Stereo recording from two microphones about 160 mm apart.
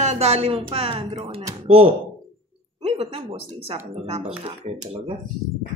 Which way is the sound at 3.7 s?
40° right (ahead or behind).